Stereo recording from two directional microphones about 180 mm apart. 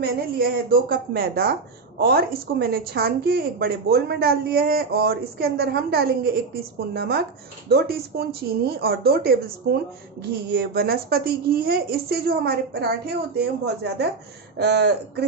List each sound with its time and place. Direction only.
0.0 s a woman's voice: 55° right (ahead or behind)